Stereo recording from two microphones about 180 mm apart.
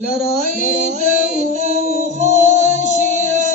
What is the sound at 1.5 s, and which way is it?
Music, 40° right (ahead or behind).